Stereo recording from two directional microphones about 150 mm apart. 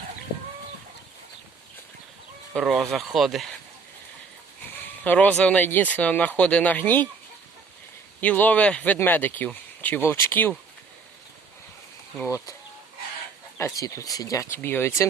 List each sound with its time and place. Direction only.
2.6 s speech: centre (ahead or behind)
5.0 s speech: 10° left (ahead or behind)
8.2 s speech: 10° left (ahead or behind)
13.6 s speech: 20° left (ahead or behind)